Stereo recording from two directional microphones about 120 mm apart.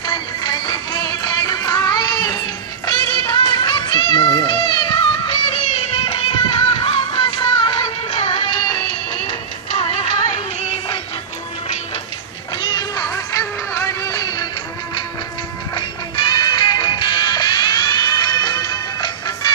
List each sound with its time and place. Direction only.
0.0 s music: 35° left (ahead or behind)
12.5 s a sound: 35° left (ahead or behind)
13.1 s music: 25° left (ahead or behind)
15.7 s music: 45° left (ahead or behind)